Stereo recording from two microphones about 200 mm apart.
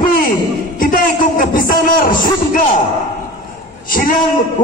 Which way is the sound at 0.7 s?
45° left (ahead or behind).